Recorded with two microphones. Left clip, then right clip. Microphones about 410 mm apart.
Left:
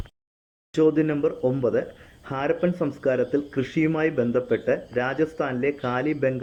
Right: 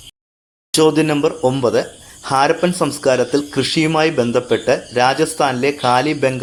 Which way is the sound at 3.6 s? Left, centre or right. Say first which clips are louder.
Right 9 dB; left.